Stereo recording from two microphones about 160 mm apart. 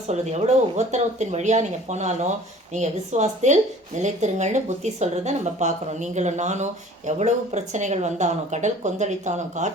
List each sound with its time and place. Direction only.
0.1 s speech: 45° right (ahead or behind)